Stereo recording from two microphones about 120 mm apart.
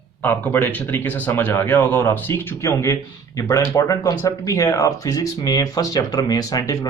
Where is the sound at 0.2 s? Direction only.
15° left (ahead or behind).